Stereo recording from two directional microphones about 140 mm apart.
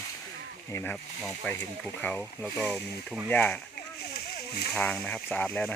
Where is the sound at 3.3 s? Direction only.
10° left (ahead or behind).